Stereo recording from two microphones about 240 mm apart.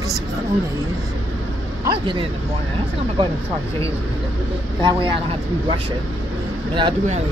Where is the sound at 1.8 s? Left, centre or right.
Centre.